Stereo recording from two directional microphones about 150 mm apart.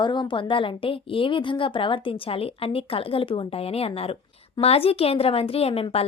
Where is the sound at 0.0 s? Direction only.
30° left (ahead or behind).